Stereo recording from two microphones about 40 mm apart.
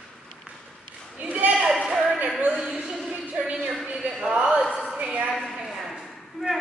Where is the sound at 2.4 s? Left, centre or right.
Right.